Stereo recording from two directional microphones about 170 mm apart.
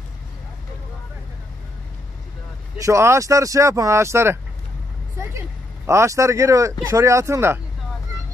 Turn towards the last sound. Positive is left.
turn(degrees=-15)  # may be behind; listen again after turning